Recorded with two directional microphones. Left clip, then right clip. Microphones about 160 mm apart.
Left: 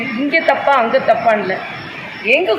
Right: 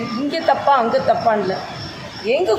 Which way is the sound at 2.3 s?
25° right (ahead or behind).